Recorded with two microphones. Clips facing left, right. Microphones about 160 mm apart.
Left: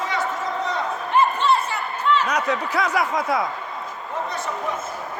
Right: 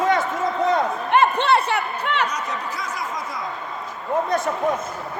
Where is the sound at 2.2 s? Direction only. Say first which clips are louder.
Left 5 dB; 65° left (ahead or behind).